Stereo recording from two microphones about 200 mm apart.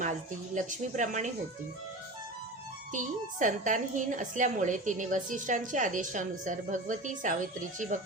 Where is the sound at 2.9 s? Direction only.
40° right (ahead or behind).